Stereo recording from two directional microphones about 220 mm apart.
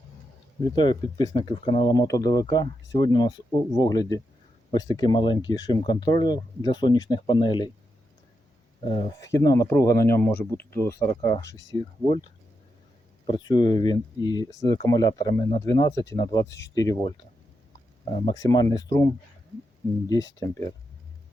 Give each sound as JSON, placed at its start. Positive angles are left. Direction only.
{"t": 0.8, "sound": "speech", "side_deg": 20}
{"t": 8.8, "sound": "speech", "side_deg": 20}
{"t": 13.2, "sound": "speech", "side_deg": 20}